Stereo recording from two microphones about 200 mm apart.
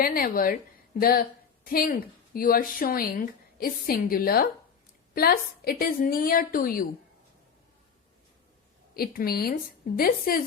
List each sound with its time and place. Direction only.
0.0 s speech: 45° left (ahead or behind)
9.0 s speech: 50° left (ahead or behind)